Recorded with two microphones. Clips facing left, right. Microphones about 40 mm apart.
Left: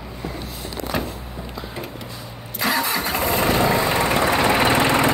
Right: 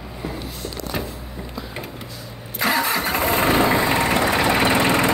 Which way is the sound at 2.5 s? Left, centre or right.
Right.